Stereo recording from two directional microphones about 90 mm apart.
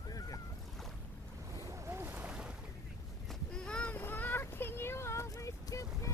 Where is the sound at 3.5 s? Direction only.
10° left (ahead or behind).